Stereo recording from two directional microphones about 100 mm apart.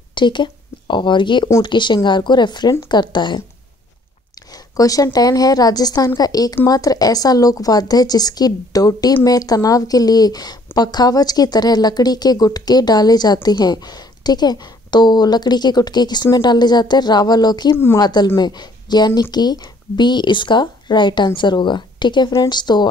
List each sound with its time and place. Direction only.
0.1 s a woman's voice: 50° left (ahead or behind)
4.5 s a woman's voice: 35° left (ahead or behind)